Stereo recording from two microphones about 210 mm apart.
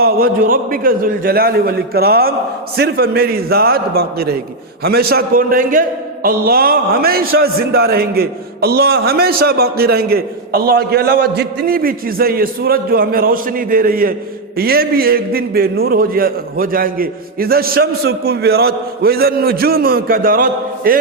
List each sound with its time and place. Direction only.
0.0 s a man's voice: 40° right (ahead or behind)